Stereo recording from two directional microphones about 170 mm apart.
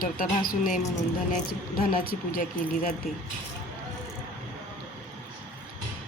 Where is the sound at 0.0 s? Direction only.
55° left (ahead or behind).